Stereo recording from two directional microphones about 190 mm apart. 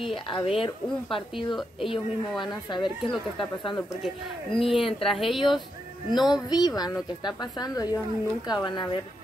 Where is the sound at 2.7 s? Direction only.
25° left (ahead or behind).